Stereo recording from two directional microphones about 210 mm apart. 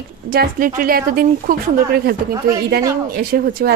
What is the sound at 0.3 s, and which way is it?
Speech, 45° right (ahead or behind).